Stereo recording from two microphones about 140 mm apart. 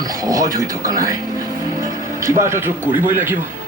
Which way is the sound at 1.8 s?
20° right (ahead or behind).